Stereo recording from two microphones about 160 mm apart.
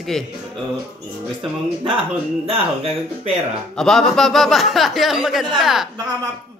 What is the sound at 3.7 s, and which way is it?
Speech, 5° left (ahead or behind).